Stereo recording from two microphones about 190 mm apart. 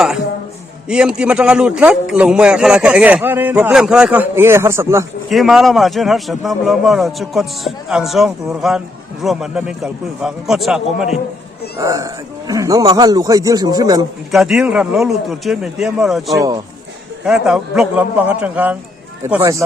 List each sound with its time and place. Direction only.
0.9 s a man's voice: 5° right (ahead or behind)
5.3 s a man's voice: centre (ahead or behind)
11.8 s a man's voice: 15° right (ahead or behind)
14.3 s a man's voice: centre (ahead or behind)